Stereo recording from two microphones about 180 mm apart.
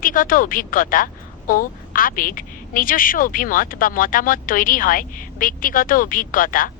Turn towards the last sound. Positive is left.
turn(degrees=50)  # may be behind; listen again after turning